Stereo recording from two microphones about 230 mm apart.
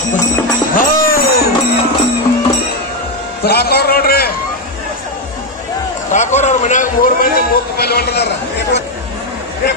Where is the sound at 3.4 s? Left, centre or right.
Left.